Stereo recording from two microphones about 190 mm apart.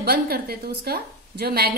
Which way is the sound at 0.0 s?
55° right (ahead or behind).